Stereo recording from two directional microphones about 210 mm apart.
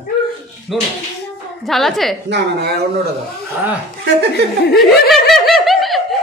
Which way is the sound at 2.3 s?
55° right (ahead or behind).